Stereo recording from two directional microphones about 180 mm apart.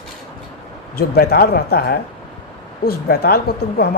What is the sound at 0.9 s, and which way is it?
A woman's voice, 60° left (ahead or behind).